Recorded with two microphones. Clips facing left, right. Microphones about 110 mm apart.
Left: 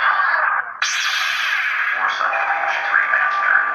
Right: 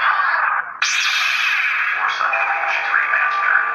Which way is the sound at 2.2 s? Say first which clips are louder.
Left 1 dB; 15° left (ahead or behind).